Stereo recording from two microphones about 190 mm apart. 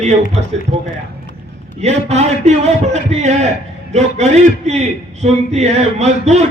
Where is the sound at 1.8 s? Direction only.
35° right (ahead or behind).